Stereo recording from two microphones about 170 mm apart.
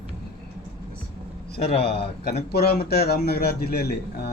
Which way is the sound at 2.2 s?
65° left (ahead or behind).